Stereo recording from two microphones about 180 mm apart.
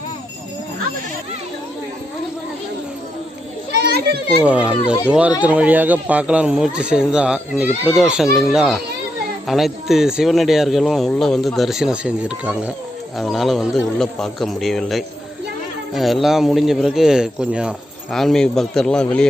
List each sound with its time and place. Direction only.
3.7 s children playing: 60° right (ahead or behind)
4.4 s speech: 5° right (ahead or behind)